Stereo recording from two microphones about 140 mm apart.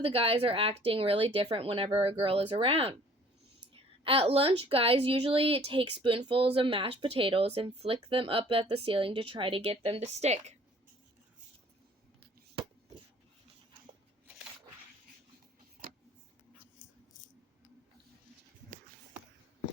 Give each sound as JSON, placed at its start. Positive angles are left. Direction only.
{"t": 0.0, "sound": "speech", "side_deg": -45}
{"t": 4.0, "sound": "a woman's voice", "side_deg": -40}